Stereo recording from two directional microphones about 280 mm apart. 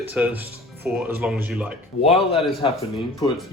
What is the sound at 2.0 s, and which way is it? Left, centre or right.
Speech, left.